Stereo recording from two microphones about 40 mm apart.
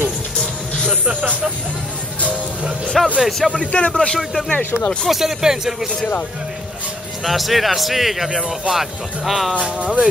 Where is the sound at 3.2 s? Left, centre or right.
Centre.